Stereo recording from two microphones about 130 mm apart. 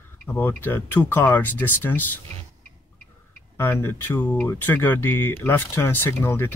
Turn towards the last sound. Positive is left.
turn(degrees=20)  # may be behind; listen again after turning